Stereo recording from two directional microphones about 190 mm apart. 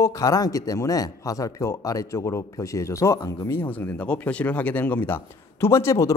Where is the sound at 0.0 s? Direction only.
15° left (ahead or behind).